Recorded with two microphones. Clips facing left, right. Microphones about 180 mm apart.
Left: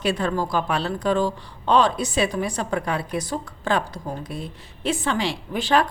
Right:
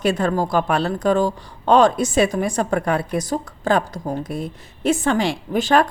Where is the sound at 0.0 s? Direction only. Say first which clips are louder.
Right 4 dB; 45° right (ahead or behind).